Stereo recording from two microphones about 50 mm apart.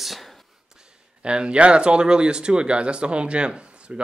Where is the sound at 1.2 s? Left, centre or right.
Centre.